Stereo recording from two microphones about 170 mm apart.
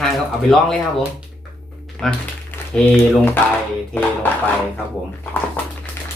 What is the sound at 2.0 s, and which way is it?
Speech, 5° left (ahead or behind).